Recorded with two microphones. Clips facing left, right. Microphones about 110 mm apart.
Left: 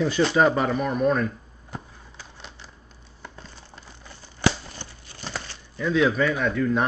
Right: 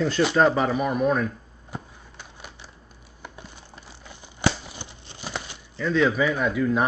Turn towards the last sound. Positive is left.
turn(degrees=-5)  # may be behind; listen again after turning